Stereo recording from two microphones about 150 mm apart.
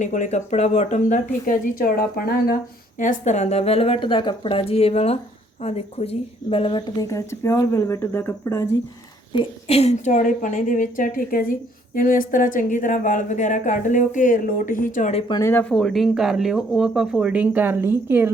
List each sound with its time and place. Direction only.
0.0 s a woman's voice: 55° left (ahead or behind); by 2.6 s 75° left (ahead or behind)
3.0 s speech: 55° left (ahead or behind); by 8.7 s 15° left (ahead or behind)
9.3 s a woman's voice: 40° left (ahead or behind); by 15.1 s 60° left (ahead or behind)
15.3 s speech: 20° left (ahead or behind)
15.7 s speech: centre (ahead or behind); by 18.3 s 15° right (ahead or behind)